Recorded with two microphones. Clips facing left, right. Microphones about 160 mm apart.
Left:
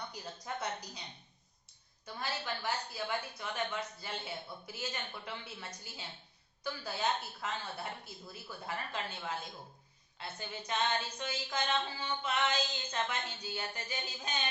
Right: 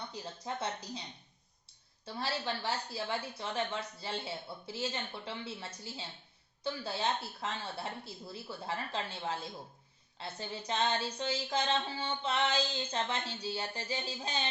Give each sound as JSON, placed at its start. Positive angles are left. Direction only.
{"t": 0.1, "sound": "speech", "side_deg": -25}
{"t": 2.0, "sound": "a woman's voice", "side_deg": -30}
{"t": 10.2, "sound": "music", "side_deg": -30}